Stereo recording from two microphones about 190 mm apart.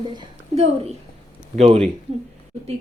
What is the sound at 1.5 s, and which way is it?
Speech, 35° right (ahead or behind).